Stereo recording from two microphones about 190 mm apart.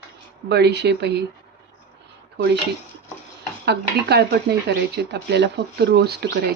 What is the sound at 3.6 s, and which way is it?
Speech, 60° right (ahead or behind).